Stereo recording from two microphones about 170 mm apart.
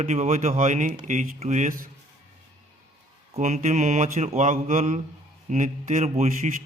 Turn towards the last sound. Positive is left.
turn(degrees=-45)  # may be behind; listen again after turning